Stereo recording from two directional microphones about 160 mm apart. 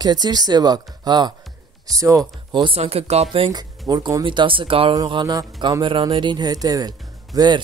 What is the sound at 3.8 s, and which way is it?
Speech, 25° right (ahead or behind).